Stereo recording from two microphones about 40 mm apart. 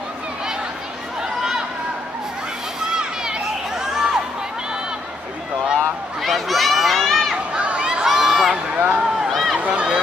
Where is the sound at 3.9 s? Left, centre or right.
Centre.